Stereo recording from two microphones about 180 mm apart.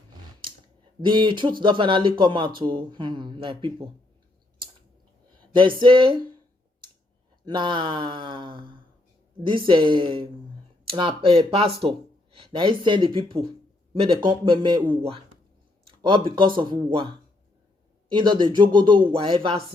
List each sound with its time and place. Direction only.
1.0 s speech: 25° right (ahead or behind)
5.8 s speech: 30° right (ahead or behind)
6.8 s clicking: 25° right (ahead or behind)
7.4 s speech: 25° right (ahead or behind)